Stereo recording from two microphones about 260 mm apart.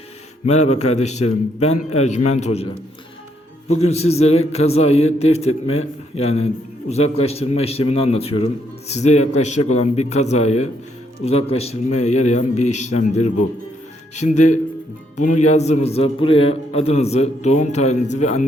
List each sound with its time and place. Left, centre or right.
0.4 s a man's voice: left
3.7 s a man's voice: left